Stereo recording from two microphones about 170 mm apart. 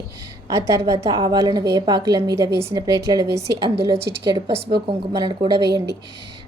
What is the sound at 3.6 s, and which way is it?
A woman's voice, 35° right (ahead or behind).